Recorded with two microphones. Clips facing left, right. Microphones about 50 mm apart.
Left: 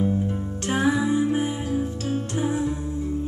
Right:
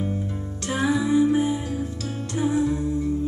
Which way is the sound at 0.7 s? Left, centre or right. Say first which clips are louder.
Left 1 dB; left.